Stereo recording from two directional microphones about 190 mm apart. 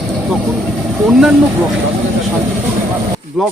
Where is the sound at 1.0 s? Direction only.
5° right (ahead or behind).